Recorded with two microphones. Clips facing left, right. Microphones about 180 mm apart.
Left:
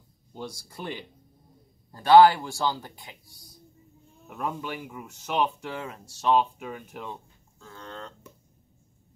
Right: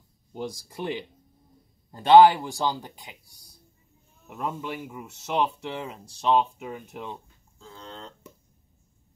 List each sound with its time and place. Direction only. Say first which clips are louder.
0.3 s speech: right 4 dB; 15° right (ahead or behind)
4.2 s speech: even; centre (ahead or behind)
7.1 s livestock: right 1 dB; 20° right (ahead or behind)